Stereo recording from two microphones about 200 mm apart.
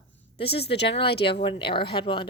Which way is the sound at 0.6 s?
55° left (ahead or behind).